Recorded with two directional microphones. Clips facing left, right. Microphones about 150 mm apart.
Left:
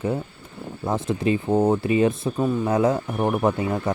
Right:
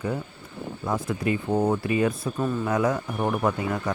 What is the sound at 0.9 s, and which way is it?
Speech, 25° left (ahead or behind).